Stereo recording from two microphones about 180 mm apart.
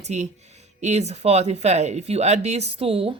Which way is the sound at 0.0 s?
40° right (ahead or behind).